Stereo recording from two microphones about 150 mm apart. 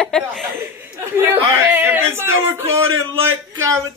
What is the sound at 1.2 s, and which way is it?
Speech, 15° right (ahead or behind).